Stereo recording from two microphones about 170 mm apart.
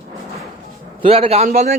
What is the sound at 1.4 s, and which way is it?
Speech, 55° right (ahead or behind).